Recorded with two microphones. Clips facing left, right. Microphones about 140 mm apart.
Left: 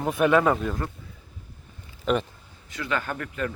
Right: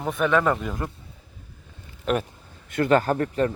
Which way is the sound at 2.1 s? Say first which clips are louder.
Even; centre (ahead or behind).